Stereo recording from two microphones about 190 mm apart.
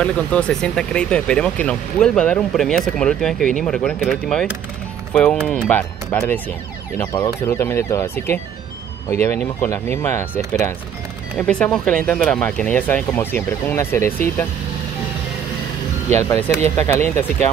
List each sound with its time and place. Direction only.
0.0 s speech: 5° left (ahead or behind)
16.1 s speech: 10° left (ahead or behind)